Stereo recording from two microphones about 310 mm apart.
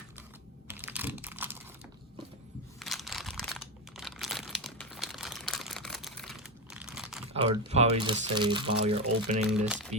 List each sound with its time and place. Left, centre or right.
0.7 s computer keyboard: centre
2.7 s crumpling: centre
6.7 s crunch: centre
7.7 s speech: centre
9.5 s speech: centre